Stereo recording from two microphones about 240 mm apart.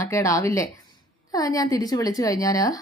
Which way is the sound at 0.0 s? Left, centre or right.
Centre.